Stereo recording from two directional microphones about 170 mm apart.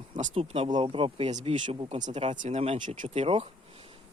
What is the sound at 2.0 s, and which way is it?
A man's voice, 40° right (ahead or behind).